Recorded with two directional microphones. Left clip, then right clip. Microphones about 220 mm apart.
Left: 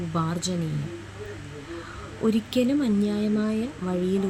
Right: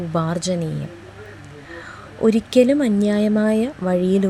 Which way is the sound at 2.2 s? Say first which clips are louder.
Right 10 dB; 30° right (ahead or behind).